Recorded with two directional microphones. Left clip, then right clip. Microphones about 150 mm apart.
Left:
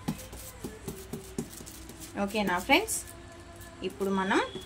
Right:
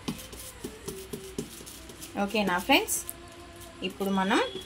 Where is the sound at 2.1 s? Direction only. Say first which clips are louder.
Right 2 dB; 30° right (ahead or behind).